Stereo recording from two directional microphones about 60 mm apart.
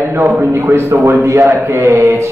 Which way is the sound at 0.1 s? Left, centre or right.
Right.